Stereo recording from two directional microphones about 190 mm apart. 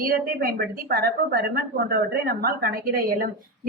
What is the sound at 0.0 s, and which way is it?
A woman's voice, 50° right (ahead or behind).